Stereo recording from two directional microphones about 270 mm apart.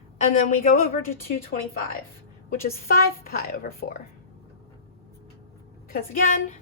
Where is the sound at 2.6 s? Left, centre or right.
Left.